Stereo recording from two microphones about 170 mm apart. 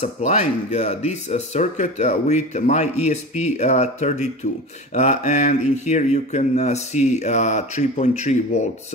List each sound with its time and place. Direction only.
0.0 s speech: 40° left (ahead or behind)